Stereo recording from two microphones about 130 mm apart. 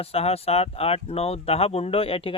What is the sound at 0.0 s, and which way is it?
Speech, 50° left (ahead or behind).